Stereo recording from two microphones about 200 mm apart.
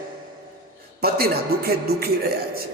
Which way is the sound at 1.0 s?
50° right (ahead or behind).